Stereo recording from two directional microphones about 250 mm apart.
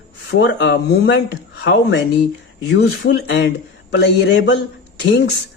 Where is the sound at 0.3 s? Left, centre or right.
Left.